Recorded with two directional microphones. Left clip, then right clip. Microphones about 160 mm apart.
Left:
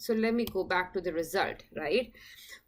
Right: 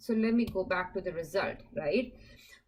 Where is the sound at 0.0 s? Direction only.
20° left (ahead or behind).